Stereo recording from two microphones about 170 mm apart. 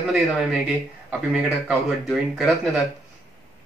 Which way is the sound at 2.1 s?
Centre (ahead or behind).